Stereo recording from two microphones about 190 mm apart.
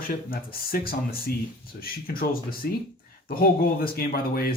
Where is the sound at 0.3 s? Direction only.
50° left (ahead or behind).